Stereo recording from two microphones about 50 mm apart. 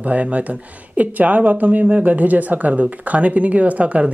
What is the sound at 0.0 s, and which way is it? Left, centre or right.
Speech, right.